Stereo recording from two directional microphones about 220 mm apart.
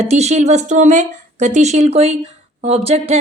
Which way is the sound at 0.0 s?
30° right (ahead or behind).